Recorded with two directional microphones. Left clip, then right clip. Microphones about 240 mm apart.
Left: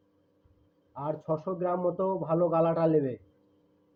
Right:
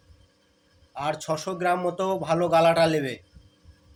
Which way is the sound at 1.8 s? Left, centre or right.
Centre.